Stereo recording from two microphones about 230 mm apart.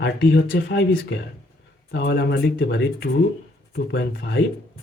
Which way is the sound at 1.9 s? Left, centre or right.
Left.